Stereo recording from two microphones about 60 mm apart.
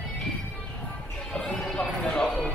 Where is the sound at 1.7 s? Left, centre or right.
Centre.